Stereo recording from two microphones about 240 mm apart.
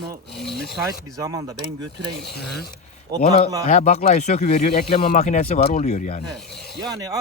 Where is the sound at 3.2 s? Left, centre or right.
Left.